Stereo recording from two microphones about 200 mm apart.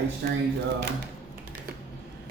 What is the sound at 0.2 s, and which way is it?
Speech, 55° right (ahead or behind).